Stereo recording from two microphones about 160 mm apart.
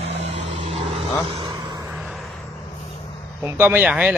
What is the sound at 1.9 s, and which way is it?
Vehicle, 5° right (ahead or behind).